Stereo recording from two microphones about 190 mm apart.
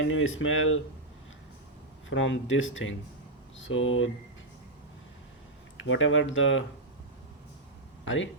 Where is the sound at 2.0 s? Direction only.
80° left.